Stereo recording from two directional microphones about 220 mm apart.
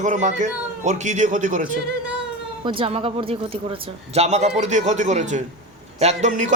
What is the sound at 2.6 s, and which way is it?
A man's voice, 25° right (ahead or behind).